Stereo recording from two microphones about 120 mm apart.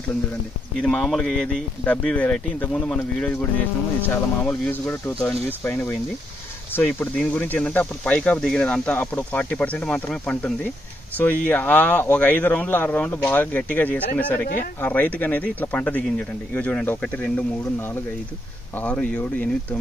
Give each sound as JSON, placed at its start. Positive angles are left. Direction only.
{"t": 0.8, "sound": "speech", "side_deg": 5}
{"t": 4.0, "sound": "speech", "side_deg": 15}
{"t": 18.8, "sound": "speech", "side_deg": 15}